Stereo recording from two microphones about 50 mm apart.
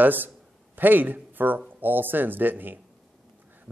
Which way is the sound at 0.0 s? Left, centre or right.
Right.